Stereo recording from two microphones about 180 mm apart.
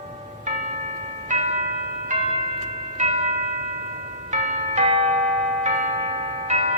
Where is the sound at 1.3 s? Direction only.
40° right (ahead or behind).